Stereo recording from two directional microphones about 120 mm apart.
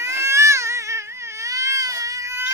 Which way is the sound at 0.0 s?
20° right (ahead or behind).